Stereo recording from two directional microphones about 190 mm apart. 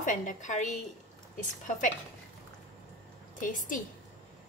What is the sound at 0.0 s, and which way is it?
Speech, 40° left (ahead or behind).